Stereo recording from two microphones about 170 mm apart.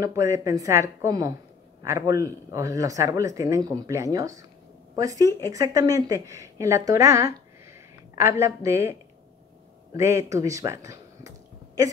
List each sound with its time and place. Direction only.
0.0 s a woman's voice: 20° right (ahead or behind)
9.9 s speech: 15° right (ahead or behind)